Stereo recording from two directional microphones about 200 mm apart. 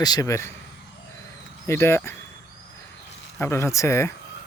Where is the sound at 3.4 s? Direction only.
15° left (ahead or behind).